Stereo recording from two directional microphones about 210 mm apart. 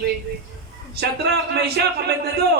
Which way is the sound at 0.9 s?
50° right (ahead or behind).